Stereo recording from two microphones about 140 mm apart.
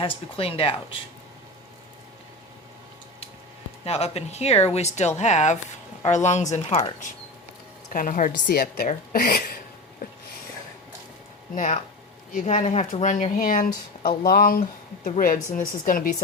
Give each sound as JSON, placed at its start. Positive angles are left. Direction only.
{"t": 0.0, "sound": "speech", "side_deg": 45}
{"t": 3.8, "sound": "speech", "side_deg": 50}
{"t": 7.9, "sound": "a woman's voice", "side_deg": 70}
{"t": 11.5, "sound": "speech", "side_deg": 65}
{"t": 14.3, "sound": "speech", "side_deg": 90}
{"t": 15.2, "sound": "a woman's voice", "side_deg": 75}